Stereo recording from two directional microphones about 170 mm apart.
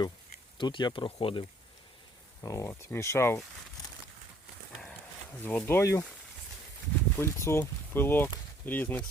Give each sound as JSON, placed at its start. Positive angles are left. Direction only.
{"t": 0.6, "sound": "speech", "side_deg": 25}
{"t": 2.4, "sound": "speech", "side_deg": 20}
{"t": 5.4, "sound": "speech", "side_deg": 10}
{"t": 7.2, "sound": "speech", "side_deg": 15}